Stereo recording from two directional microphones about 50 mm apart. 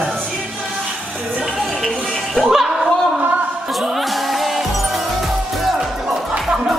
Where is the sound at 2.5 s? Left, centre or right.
Centre.